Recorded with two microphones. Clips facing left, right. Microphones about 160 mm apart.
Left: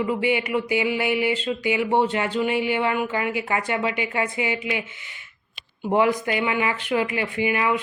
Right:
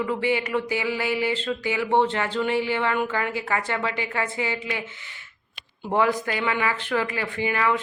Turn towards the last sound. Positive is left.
turn(degrees=15)  # may be behind; listen again after turning